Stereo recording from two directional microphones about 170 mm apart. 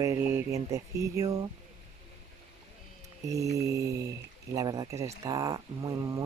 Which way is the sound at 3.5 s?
20° right (ahead or behind).